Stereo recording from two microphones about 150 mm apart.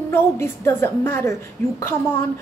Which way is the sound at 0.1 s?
15° left (ahead or behind).